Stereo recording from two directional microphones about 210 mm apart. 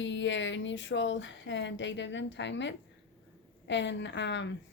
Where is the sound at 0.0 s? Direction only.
60° left (ahead or behind).